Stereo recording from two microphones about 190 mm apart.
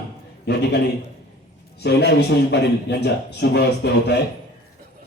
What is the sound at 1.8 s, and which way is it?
Speech, 60° left (ahead or behind).